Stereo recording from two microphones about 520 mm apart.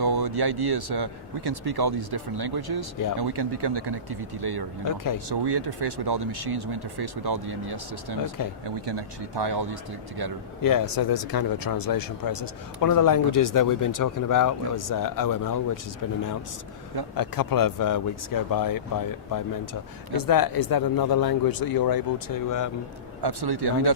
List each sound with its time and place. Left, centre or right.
0.0 s speech: right
10.6 s speech: left
17.2 s speech: left
23.2 s speech: right